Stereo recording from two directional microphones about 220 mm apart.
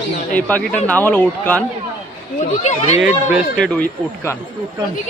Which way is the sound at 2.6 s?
30° left (ahead or behind).